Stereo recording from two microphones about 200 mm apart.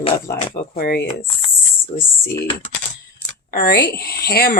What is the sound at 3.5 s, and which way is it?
Speech, 50° left (ahead or behind).